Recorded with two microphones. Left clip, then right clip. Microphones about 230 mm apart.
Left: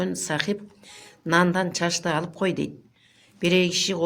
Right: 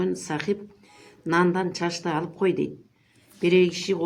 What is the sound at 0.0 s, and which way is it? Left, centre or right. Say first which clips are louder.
A woman's voice: left 1 dB; left.